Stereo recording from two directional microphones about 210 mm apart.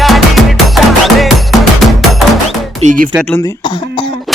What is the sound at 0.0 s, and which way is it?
Music, centre (ahead or behind).